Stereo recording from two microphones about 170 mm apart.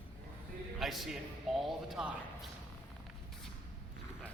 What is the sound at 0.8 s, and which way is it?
Speech, centre (ahead or behind).